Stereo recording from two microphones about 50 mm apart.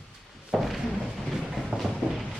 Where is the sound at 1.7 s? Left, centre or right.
Right.